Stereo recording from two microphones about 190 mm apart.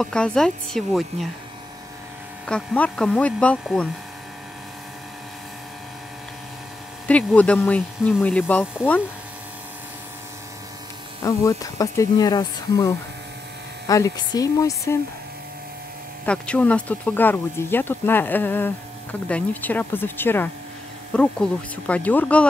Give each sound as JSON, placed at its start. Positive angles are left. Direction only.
{"t": 0.0, "sound": "speech", "side_deg": 5}
{"t": 2.4, "sound": "speech", "side_deg": 5}
{"t": 7.1, "sound": "speech", "side_deg": 5}
{"t": 11.2, "sound": "speech", "side_deg": 20}
{"t": 16.3, "sound": "speech", "side_deg": 5}